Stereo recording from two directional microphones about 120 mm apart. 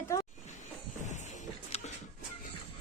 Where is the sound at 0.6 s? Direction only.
85° left.